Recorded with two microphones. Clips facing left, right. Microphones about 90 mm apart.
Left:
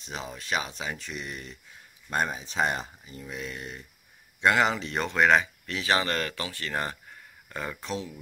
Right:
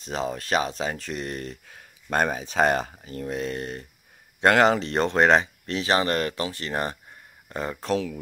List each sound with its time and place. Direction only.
0.0 s speech: 40° right (ahead or behind)
1.7 s speech: 75° right (ahead or behind)
2.4 s speech: 60° right (ahead or behind); by 3.3 s 75° right (ahead or behind)
3.3 s speech: 45° right (ahead or behind); by 7.8 s 25° right (ahead or behind)
7.8 s speech: 65° right (ahead or behind)